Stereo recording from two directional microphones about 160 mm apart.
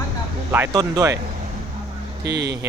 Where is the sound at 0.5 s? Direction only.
15° right (ahead or behind).